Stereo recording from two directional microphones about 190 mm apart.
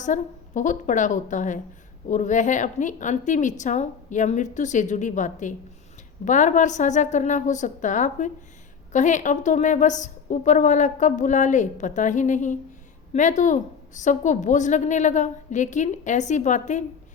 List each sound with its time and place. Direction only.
0.0 s a woman's voice: 40° left (ahead or behind)